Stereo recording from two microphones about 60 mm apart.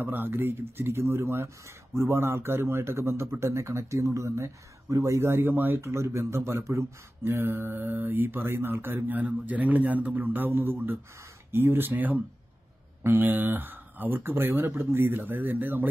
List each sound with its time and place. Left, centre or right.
0.0 s a man's voice: right
5.9 s a man's voice: right
7.2 s speech: right